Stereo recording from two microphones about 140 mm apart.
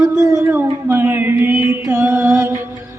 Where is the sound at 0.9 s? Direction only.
15° right (ahead or behind).